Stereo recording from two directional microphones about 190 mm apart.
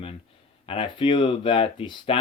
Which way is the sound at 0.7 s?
25° left (ahead or behind).